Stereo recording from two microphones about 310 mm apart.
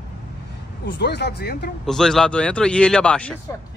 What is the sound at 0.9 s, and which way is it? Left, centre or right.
Speech, left.